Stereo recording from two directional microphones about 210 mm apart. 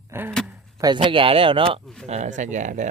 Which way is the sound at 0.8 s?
20° right (ahead or behind).